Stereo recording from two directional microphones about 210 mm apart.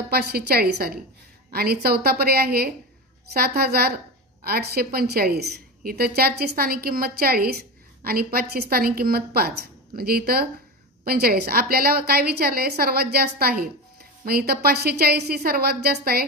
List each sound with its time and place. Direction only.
0.1 s a woman's voice: 50° right (ahead or behind)